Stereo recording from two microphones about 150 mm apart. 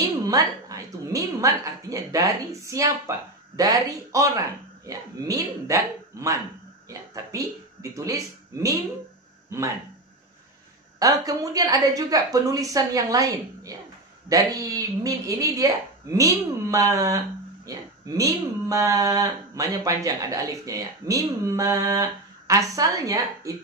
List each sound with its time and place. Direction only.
0.3 s a woman's voice: 25° right (ahead or behind)
11.0 s a woman's voice: 25° right (ahead or behind)